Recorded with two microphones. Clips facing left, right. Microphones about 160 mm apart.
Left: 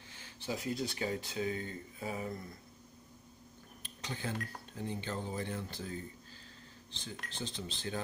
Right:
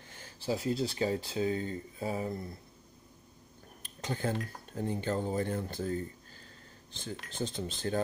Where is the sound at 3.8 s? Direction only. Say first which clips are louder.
Right 7 dB; 45° right (ahead or behind).